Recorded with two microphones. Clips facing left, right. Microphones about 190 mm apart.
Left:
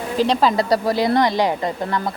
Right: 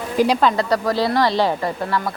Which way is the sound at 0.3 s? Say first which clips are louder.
Left 1 dB; 5° left (ahead or behind).